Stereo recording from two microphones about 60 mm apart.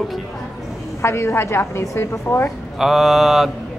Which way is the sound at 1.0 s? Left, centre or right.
Left.